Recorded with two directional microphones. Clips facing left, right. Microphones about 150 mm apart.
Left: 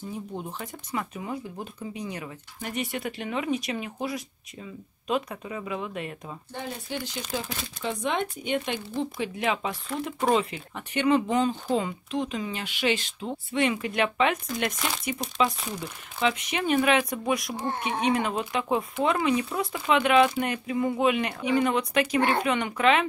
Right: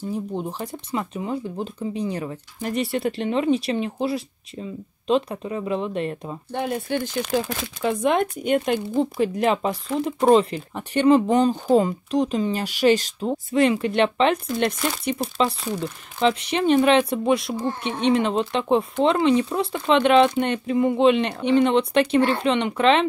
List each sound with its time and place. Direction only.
0.3 s speech: 30° right (ahead or behind)
6.5 s speech: 65° right (ahead or behind); by 14.7 s 30° right (ahead or behind)
15.2 s speech: 5° right (ahead or behind)
16.2 s speech: 30° right (ahead or behind)